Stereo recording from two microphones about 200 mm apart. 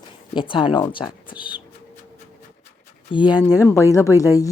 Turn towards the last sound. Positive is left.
turn(degrees=15)  # may be behind; listen again after turning